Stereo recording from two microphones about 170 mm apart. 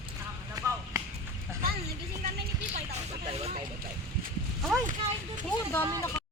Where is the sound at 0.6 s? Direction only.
20° right (ahead or behind).